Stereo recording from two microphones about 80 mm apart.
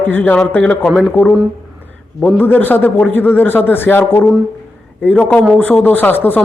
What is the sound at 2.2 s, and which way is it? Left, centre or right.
A man's voice, left.